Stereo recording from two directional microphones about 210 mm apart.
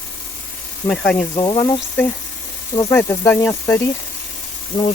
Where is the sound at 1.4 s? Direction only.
20° left (ahead or behind).